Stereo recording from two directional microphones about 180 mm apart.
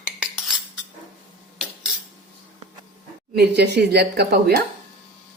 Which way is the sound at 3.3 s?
65° right (ahead or behind).